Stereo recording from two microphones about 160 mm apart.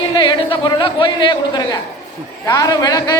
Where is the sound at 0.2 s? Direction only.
30° left (ahead or behind).